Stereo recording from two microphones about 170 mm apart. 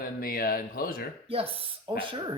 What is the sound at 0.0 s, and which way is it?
A man's voice, 60° left (ahead or behind).